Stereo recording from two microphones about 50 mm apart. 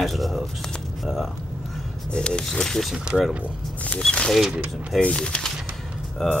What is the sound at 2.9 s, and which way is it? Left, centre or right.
Speech, centre.